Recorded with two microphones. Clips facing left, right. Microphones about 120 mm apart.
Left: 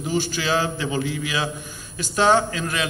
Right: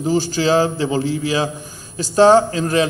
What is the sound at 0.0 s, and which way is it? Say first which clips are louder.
A man's voice: right 7 dB; 35° right (ahead or behind).